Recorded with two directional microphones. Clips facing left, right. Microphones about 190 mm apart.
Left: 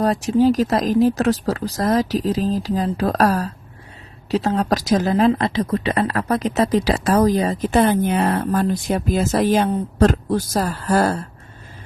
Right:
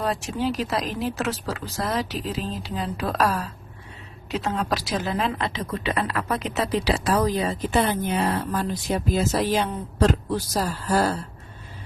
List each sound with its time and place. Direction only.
0.0 s speech: 40° left (ahead or behind)